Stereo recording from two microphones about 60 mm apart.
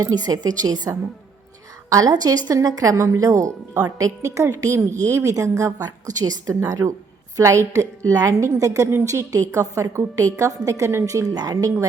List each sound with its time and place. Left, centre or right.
0.0 s a woman's voice: right
1.9 s a woman's voice: right
2.5 s a woman's voice: right
2.9 s a woman's voice: right
7.3 s a woman's voice: right